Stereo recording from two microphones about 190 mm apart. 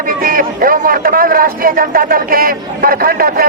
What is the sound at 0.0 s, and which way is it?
A man's voice, 45° right (ahead or behind).